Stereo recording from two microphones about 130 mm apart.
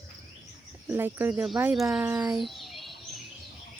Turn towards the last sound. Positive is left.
turn(degrees=0)  # may be behind; listen again after turning